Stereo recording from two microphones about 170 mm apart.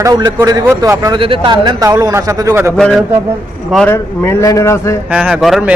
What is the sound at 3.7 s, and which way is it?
Speech, 5° left (ahead or behind).